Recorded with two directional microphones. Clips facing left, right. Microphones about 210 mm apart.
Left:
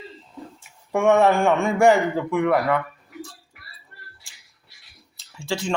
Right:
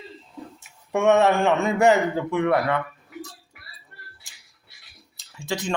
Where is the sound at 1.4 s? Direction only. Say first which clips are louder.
Left 1 dB; 20° right (ahead or behind).